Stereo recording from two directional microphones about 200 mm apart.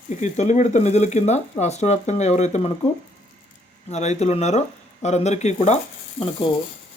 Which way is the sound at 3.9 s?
35° left (ahead or behind).